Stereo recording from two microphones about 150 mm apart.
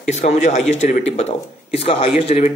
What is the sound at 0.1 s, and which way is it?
Speech, 50° left (ahead or behind).